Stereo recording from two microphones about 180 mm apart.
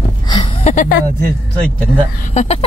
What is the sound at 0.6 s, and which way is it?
Speech, 45° left (ahead or behind).